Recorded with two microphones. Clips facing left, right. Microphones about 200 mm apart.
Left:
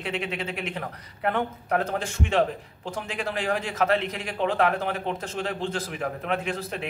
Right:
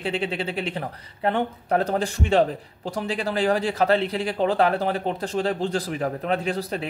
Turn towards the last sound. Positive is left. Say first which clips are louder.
# right 4 dB
turn(degrees=-35)  # may be behind; listen again after turning